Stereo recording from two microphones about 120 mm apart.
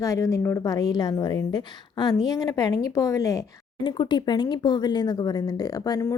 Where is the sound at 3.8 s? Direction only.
40° left (ahead or behind).